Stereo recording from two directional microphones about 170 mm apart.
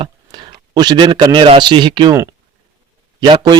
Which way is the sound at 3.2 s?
25° right (ahead or behind).